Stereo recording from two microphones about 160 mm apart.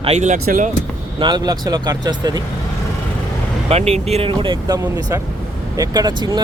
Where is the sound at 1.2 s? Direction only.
25° right (ahead or behind).